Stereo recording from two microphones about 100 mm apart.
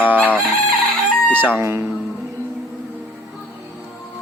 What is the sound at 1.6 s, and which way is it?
Speech, 25° right (ahead or behind).